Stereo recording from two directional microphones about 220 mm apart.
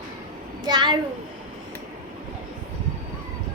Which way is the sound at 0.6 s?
20° right (ahead or behind).